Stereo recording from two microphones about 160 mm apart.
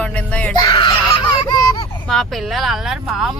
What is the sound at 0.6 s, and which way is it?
Speech, 30° left (ahead or behind).